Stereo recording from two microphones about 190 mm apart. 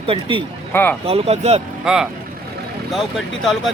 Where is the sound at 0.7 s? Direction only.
10° left (ahead or behind).